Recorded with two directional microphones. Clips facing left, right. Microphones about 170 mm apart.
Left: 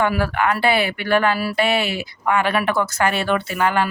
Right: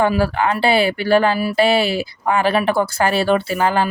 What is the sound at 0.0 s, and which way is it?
Speech, 30° right (ahead or behind).